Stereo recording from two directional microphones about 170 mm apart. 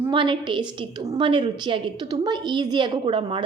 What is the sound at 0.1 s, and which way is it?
A woman's voice, 30° right (ahead or behind).